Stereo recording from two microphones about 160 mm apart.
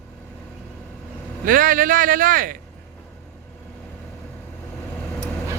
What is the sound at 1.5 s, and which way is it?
Speech, 60° right (ahead or behind).